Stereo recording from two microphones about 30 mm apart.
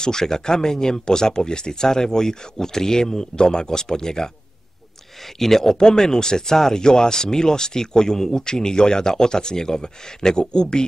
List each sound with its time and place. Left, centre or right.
0.0 s speech: centre
5.4 s speech: centre; by 10.9 s left